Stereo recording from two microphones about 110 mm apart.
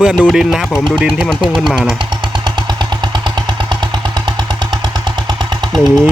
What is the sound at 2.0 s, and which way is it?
Vehicle, 45° right (ahead or behind).